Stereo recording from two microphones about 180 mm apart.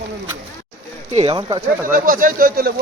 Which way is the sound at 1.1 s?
35° right (ahead or behind).